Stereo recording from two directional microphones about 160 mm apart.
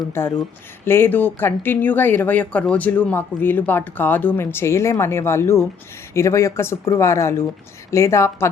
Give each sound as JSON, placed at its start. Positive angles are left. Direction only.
{"t": 0.1, "sound": "speech", "side_deg": 15}